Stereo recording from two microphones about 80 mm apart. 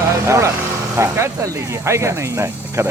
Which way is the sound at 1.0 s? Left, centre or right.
Right.